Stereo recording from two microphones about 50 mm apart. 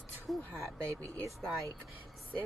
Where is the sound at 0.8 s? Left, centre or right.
Right.